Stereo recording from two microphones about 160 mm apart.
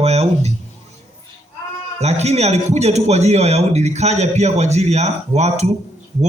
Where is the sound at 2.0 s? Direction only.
45° right (ahead or behind).